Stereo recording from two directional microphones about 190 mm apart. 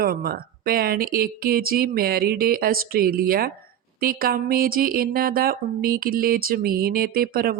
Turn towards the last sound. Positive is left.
turn(degrees=-50)  # may be behind; listen again after turning